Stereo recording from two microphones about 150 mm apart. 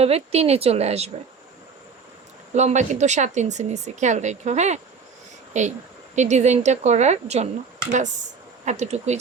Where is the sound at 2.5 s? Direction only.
50° right (ahead or behind).